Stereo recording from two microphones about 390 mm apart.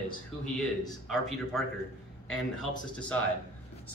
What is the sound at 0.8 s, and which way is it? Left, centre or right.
Speech, centre.